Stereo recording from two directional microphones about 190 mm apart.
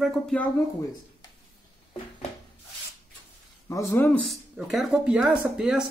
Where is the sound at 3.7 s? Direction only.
15° left (ahead or behind).